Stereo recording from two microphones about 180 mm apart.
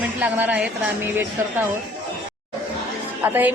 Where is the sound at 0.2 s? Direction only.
10° right (ahead or behind).